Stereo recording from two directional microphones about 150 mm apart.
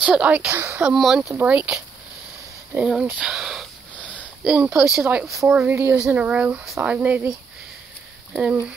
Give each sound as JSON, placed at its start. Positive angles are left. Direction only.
{"t": 0.0, "sound": "speech", "side_deg": -5}
{"t": 0.9, "sound": "speech", "side_deg": 0}
{"t": 2.7, "sound": "a sound", "side_deg": -5}
{"t": 4.5, "sound": "speech", "side_deg": -10}
{"t": 5.0, "sound": "speech", "side_deg": -15}